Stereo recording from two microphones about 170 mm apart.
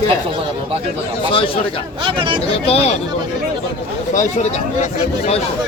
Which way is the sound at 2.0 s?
30° right (ahead or behind).